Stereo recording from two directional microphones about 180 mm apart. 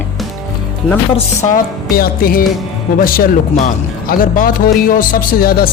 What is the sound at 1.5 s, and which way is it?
Speech, 55° left (ahead or behind).